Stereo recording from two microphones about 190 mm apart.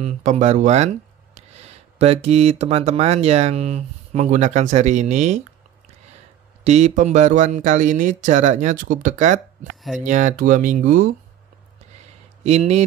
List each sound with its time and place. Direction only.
0.0 s speech: 40° right (ahead or behind)
6.6 s speech: 35° right (ahead or behind)
12.4 s speech: 35° right (ahead or behind)